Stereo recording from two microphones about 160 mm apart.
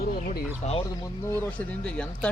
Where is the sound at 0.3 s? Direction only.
40° left (ahead or behind).